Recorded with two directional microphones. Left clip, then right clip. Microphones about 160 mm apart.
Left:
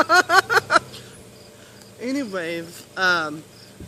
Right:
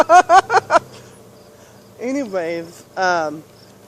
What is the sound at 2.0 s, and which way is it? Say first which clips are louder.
Speech: right 5 dB; 25° left (ahead or behind).